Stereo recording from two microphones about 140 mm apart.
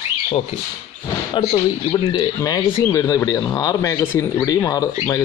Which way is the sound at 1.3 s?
35° left (ahead or behind).